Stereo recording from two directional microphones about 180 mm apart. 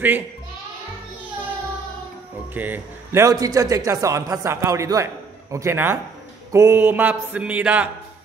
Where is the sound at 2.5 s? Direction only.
10° right (ahead or behind).